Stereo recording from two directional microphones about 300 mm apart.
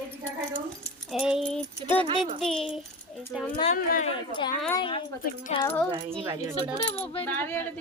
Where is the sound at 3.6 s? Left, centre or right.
Left.